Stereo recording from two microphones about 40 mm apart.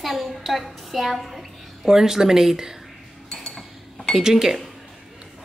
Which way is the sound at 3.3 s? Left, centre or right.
Centre.